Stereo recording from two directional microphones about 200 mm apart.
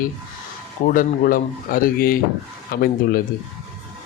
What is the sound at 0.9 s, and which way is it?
A man's voice, 45° left (ahead or behind).